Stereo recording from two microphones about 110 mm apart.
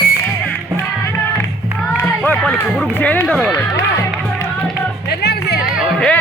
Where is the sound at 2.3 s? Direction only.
10° left (ahead or behind).